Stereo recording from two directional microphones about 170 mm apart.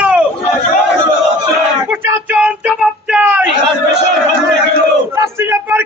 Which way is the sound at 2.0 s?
10° right (ahead or behind).